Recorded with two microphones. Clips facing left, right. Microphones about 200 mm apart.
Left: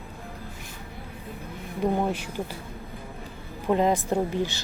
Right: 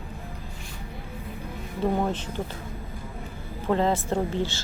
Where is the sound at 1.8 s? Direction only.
10° left (ahead or behind).